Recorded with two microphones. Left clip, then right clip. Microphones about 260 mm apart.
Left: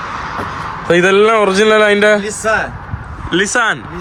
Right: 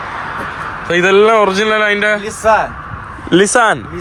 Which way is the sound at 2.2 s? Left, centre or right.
Right.